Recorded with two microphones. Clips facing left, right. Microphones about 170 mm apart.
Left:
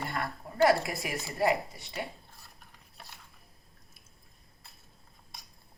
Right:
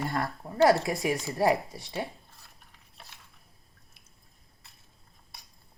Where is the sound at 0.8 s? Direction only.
30° right (ahead or behind).